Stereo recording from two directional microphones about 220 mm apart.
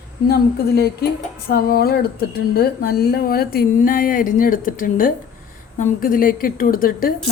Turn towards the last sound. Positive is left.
turn(degrees=40)  # may be behind; listen again after turning